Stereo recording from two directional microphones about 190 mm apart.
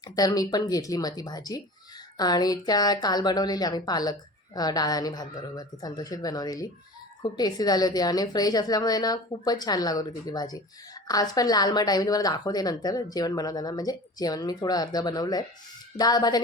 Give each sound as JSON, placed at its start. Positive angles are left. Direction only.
{"t": 0.2, "sound": "a woman's voice", "side_deg": 20}